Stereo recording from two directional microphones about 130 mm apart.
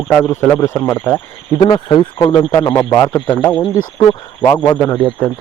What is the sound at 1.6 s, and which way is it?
Speech, 35° left (ahead or behind).